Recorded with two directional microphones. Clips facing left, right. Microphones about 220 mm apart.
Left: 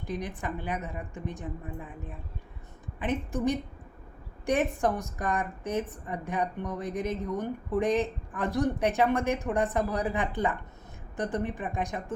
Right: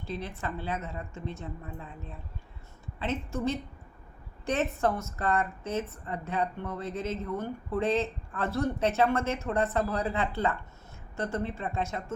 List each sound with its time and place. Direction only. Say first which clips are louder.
0.0 s a woman's voice: left 2 dB; 15° left (ahead or behind)